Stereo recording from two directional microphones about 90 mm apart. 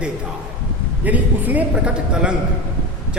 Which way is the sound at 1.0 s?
15° right (ahead or behind).